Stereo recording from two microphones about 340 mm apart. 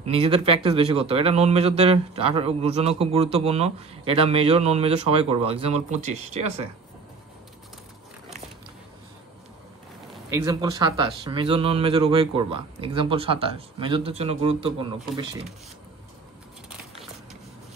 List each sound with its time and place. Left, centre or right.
0.0 s a man's voice: centre
10.3 s a man's voice: centre